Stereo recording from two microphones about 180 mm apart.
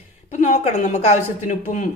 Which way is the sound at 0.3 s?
40° left (ahead or behind).